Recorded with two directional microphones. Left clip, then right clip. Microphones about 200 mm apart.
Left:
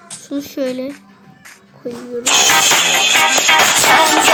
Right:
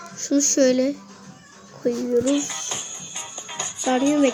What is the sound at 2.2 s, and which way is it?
Music, 60° left (ahead or behind).